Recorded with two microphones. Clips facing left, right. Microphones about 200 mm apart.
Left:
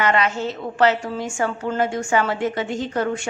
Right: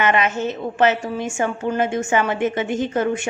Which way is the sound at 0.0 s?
20° right (ahead or behind).